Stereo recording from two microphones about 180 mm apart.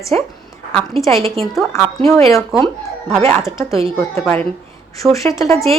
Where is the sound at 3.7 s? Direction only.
30° right (ahead or behind).